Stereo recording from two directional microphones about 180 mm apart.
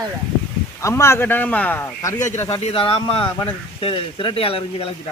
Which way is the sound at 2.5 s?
30° left (ahead or behind).